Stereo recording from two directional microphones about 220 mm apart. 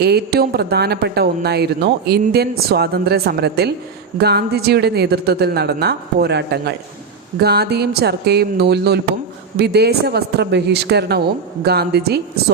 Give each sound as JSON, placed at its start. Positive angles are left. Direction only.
{"t": 0.0, "sound": "speech", "side_deg": -45}